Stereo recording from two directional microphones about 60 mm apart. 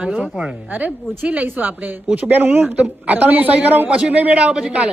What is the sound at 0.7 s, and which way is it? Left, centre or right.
Speech, right.